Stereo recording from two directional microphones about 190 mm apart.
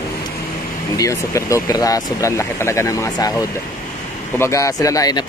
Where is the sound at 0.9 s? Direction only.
15° left (ahead or behind).